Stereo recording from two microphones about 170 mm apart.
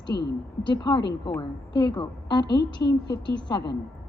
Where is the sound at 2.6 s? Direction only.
80° left.